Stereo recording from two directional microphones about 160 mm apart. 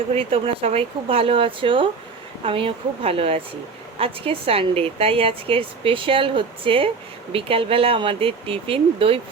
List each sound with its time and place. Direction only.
0.1 s speech: 35° right (ahead or behind)